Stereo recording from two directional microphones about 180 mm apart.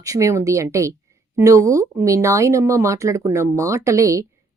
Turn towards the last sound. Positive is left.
turn(degrees=-15)  # may be behind; listen again after turning